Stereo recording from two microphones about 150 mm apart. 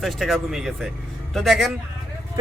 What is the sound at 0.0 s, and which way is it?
A man's voice, centre (ahead or behind).